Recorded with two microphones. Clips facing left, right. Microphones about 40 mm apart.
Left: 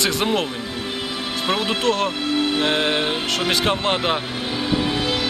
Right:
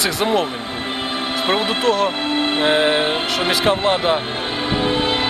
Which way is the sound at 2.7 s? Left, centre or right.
Centre.